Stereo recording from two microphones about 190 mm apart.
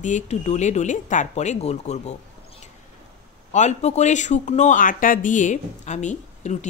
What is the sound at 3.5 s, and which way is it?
Speech, 35° left (ahead or behind).